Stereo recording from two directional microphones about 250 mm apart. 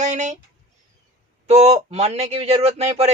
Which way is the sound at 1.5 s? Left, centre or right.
Right.